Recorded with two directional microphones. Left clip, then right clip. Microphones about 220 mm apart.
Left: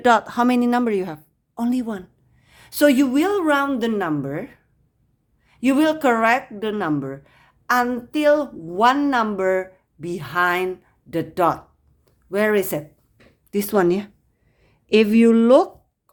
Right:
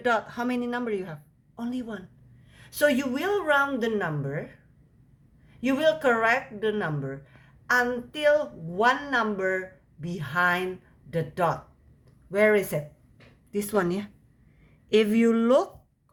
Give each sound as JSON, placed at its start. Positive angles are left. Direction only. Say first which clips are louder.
{"t": 0.0, "sound": "a woman's voice", "louder": "left 9 dB", "side_deg": 45}
{"t": 13.5, "sound": "a woman's voice", "louder": "left 8 dB", "side_deg": 35}